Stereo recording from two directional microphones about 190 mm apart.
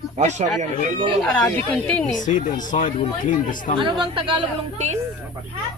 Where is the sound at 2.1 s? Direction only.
45° left (ahead or behind).